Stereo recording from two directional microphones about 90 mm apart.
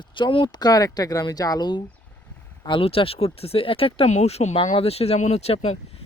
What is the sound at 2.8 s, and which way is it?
Speech, 90° left.